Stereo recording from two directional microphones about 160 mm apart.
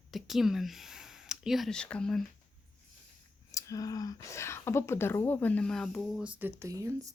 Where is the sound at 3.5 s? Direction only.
20° left (ahead or behind); by 6.2 s 5° left (ahead or behind).